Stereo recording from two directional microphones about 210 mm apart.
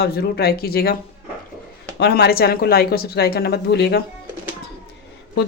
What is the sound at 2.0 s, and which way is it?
Speech, 50° left (ahead or behind).